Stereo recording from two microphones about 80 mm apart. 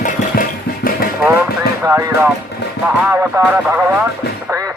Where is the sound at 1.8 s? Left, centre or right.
Right.